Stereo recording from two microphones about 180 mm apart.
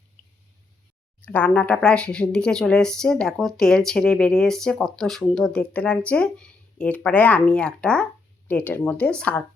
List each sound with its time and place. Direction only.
1.2 s speech: 10° left (ahead or behind)